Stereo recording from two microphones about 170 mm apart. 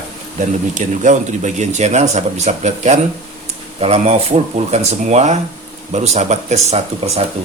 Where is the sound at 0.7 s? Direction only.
45° right (ahead or behind).